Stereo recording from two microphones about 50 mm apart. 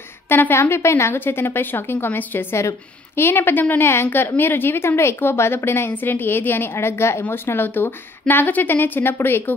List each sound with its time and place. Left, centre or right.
0.3 s a woman's voice: left
0.6 s a woman's voice: left
1.2 s a woman's voice: left
5.9 s a woman's voice: left
7.2 s a woman's voice: left